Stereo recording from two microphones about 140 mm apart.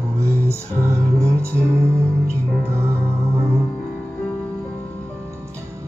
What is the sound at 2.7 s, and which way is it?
Music, 20° right (ahead or behind).